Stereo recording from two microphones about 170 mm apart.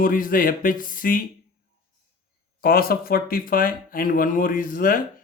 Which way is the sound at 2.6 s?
60° left (ahead or behind).